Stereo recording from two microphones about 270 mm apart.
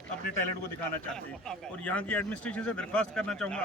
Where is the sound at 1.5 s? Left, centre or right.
Centre.